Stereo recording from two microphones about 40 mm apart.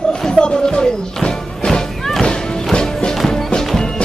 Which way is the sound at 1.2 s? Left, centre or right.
Centre.